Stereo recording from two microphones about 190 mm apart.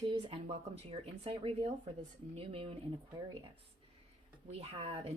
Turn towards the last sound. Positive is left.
turn(degrees=-30)  # may be behind; listen again after turning